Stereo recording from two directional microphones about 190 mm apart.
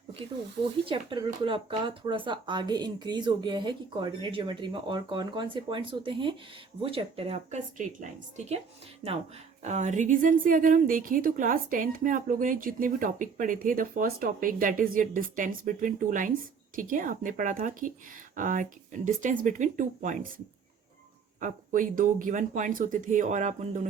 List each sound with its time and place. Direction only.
0.2 s speech: 25° right (ahead or behind)
9.6 s a woman's voice: 40° right (ahead or behind)
21.4 s speech: 45° right (ahead or behind)